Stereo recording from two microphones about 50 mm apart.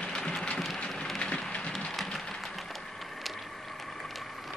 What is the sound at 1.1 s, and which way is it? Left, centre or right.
Wood, centre.